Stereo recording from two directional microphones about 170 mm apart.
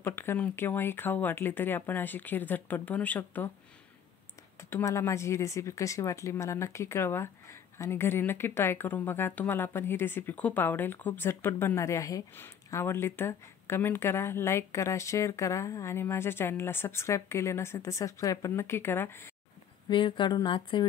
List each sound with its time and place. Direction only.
0.0 s speech: 15° left (ahead or behind)
4.6 s speech: 15° left (ahead or behind)
19.9 s a woman's voice: 30° left (ahead or behind)